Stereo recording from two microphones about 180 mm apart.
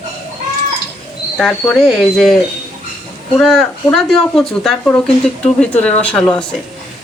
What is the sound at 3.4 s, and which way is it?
Speech, centre (ahead or behind).